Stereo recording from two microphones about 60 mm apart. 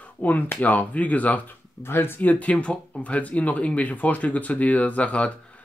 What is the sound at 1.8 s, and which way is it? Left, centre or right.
Speech, left.